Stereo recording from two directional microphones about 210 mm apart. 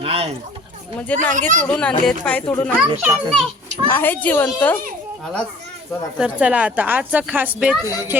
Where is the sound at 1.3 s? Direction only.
35° right (ahead or behind).